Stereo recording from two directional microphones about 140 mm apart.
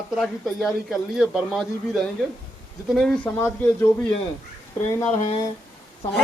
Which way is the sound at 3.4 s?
15° left (ahead or behind).